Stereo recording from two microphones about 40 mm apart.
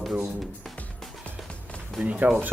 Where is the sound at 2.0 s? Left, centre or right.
Right.